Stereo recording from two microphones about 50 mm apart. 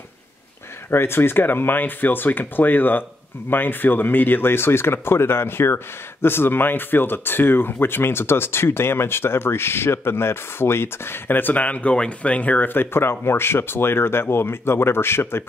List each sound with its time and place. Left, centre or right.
0.8 s speech: left